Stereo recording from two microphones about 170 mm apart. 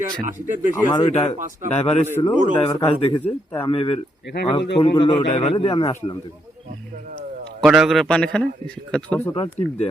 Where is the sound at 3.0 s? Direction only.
30° left (ahead or behind).